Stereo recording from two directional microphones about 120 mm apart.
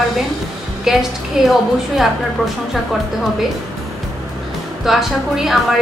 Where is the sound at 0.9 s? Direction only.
5° right (ahead or behind).